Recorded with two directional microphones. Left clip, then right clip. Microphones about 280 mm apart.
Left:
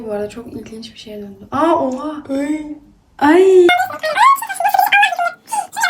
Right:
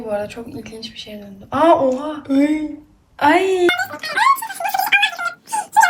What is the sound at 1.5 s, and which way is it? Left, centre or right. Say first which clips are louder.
Speech: right 2 dB; centre.